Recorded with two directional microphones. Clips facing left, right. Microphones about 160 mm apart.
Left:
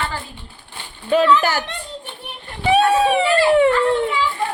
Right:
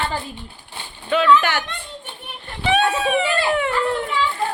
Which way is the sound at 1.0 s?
35° left (ahead or behind).